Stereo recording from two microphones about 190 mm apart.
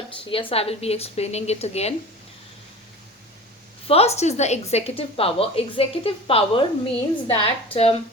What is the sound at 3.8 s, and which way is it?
A woman's voice, 30° left (ahead or behind).